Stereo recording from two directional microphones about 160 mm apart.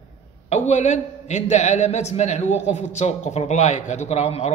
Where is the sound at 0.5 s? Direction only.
45° left (ahead or behind).